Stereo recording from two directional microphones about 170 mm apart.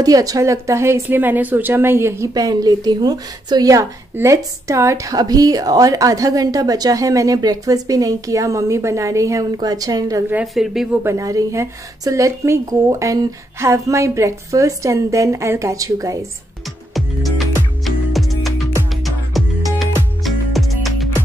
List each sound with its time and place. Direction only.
0.0 s a woman's voice: 20° right (ahead or behind)
10.3 s a woman's voice: centre (ahead or behind)
11.0 s a woman's voice: 15° right (ahead or behind)
17.8 s music: centre (ahead or behind)